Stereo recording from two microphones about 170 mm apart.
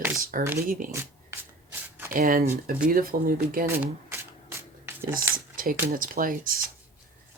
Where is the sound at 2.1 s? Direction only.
60° right (ahead or behind).